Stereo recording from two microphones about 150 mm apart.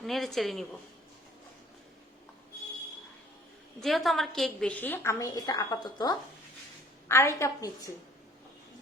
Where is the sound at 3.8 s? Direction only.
Centre (ahead or behind); by 7.9 s 20° left (ahead or behind).